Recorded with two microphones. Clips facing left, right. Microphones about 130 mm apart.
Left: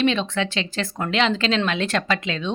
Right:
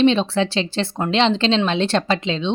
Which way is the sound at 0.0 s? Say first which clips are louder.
Right 5 dB; 30° right (ahead or behind).